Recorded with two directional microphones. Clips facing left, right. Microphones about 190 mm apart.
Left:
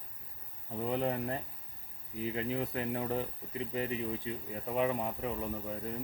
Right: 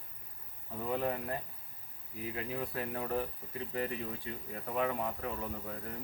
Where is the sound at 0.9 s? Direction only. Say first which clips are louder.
Left 1 dB; 25° left (ahead or behind).